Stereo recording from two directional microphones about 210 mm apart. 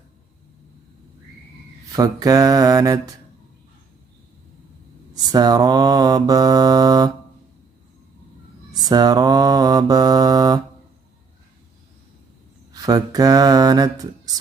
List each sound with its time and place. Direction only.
1.9 s mantra: 15° right (ahead or behind)
5.1 s mantra: 20° right (ahead or behind)
8.7 s mantra: 20° right (ahead or behind)
12.7 s mantra: 15° right (ahead or behind)